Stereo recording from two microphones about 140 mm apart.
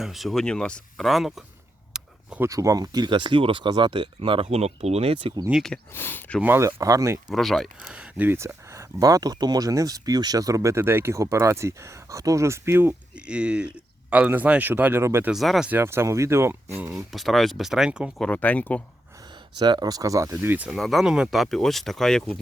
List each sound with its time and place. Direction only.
0.0 s speech: centre (ahead or behind)
1.9 s a sound: 5° right (ahead or behind)
2.4 s speech: 25° right (ahead or behind)
5.5 s speech: 5° right (ahead or behind)
5.7 s speech: 15° left (ahead or behind)
6.4 s speech: 15° right (ahead or behind)
7.3 s speech: centre (ahead or behind); by 15.3 s 15° right (ahead or behind)
15.3 s speech: centre (ahead or behind)
15.7 s speech: 15° right (ahead or behind)
16.9 s speech: centre (ahead or behind)
18.2 s speech: 10° left (ahead or behind)
19.5 s speech: 30° right (ahead or behind); by 20.7 s 15° right (ahead or behind)
20.7 s speech: centre (ahead or behind)